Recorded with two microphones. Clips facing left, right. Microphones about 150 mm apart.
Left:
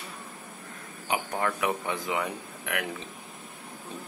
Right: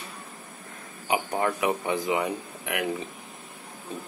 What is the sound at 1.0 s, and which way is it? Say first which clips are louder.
Speech: right 3 dB; 10° right (ahead or behind).